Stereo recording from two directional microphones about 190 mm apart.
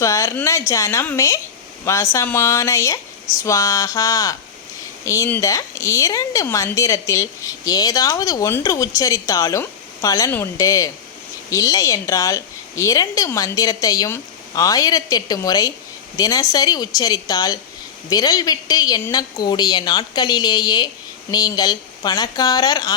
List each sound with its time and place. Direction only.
0.0 s a woman's voice: 15° left (ahead or behind)